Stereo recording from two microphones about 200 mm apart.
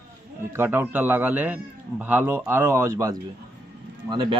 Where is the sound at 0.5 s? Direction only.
10° right (ahead or behind).